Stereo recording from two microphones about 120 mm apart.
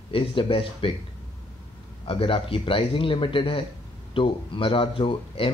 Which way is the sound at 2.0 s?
45° left (ahead or behind).